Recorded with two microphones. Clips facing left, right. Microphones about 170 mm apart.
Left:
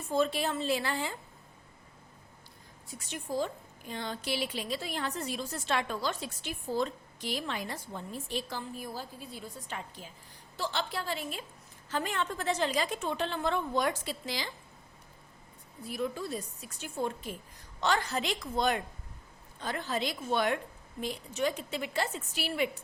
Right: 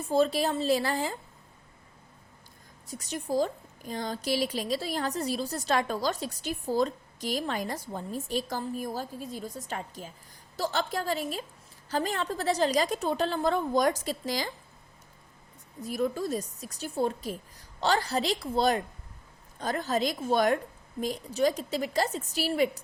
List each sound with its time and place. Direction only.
0.1 s a woman's voice: 35° right (ahead or behind)
2.8 s a woman's voice: 40° right (ahead or behind)
15.8 s a woman's voice: 40° right (ahead or behind)